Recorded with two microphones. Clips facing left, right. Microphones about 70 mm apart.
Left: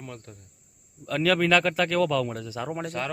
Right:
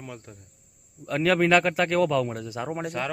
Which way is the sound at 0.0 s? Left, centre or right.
Centre.